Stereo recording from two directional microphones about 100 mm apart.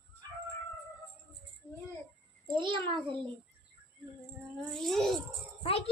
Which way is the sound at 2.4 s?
50° right (ahead or behind).